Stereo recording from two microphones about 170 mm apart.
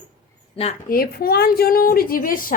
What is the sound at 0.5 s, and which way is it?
Speech, 35° left (ahead or behind).